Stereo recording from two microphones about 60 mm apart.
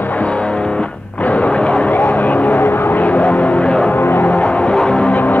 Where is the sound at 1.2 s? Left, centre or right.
Left.